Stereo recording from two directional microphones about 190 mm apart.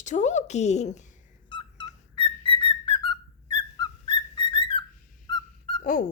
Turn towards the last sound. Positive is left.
turn(degrees=25)  # may be behind; listen again after turning